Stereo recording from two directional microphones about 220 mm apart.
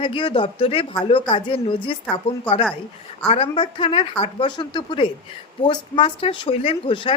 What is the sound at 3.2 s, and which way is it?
A woman's voice, 25° left (ahead or behind).